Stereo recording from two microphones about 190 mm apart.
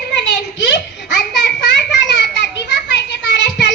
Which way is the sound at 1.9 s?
65° left (ahead or behind).